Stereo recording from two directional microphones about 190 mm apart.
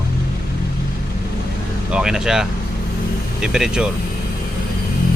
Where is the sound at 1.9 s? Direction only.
5° right (ahead or behind).